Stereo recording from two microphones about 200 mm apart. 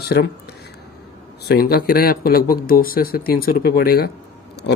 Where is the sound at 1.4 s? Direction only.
50° left (ahead or behind).